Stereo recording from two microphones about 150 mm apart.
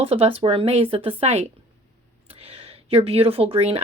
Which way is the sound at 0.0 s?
40° right (ahead or behind).